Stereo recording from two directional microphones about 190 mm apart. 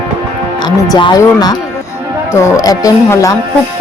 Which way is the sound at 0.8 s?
20° left (ahead or behind).